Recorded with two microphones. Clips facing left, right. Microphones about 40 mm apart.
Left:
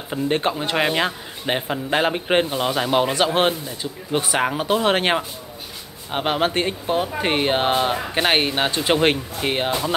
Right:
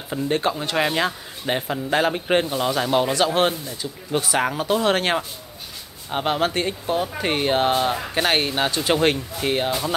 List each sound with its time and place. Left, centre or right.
0.1 s speech: left